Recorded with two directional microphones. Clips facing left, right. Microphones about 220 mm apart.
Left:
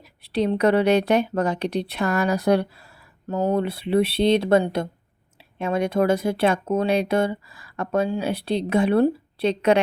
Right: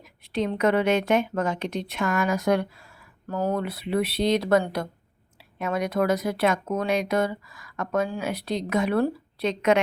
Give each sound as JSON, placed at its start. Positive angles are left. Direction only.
{"t": 0.2, "sound": "a woman's voice", "side_deg": 35}
{"t": 3.2, "sound": "speech", "side_deg": 20}